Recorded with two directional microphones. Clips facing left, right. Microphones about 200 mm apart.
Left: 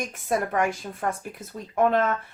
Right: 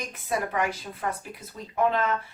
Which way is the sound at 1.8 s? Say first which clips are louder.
Left 3 dB; 50° left (ahead or behind).